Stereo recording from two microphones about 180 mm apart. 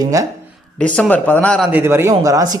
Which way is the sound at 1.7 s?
15° right (ahead or behind).